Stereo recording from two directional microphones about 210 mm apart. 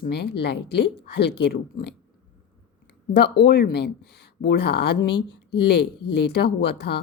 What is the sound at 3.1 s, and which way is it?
Speech, 50° left (ahead or behind).